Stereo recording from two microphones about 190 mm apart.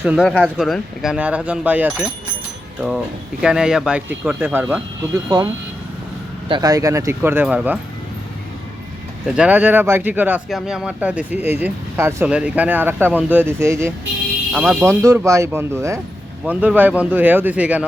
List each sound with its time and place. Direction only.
0.2 s speech: 5° left (ahead or behind)
3.4 s speech: 5° right (ahead or behind)
6.5 s speech: 20° right (ahead or behind)
9.2 s speech: 5° right (ahead or behind)
14.5 s speech: 5° right (ahead or behind)
14.8 s speech: 15° right (ahead or behind)